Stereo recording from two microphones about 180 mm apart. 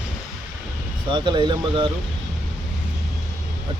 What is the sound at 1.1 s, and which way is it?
Speech, 25° right (ahead or behind).